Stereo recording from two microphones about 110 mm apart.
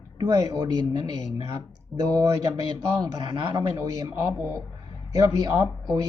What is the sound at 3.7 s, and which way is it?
Speech, 30° right (ahead or behind).